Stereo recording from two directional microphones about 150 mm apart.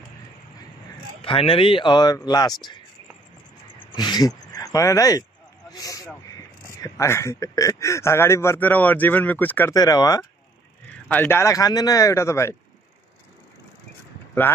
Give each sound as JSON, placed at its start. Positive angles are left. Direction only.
{"t": 1.2, "sound": "speech", "side_deg": 35}
{"t": 3.9, "sound": "a sound", "side_deg": 30}
{"t": 4.5, "sound": "a man's voice", "side_deg": 25}
{"t": 9.8, "sound": "speech", "side_deg": 25}
{"t": 11.1, "sound": "speech", "side_deg": 15}